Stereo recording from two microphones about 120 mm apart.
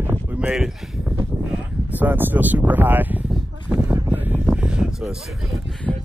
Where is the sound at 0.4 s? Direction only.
5° right (ahead or behind).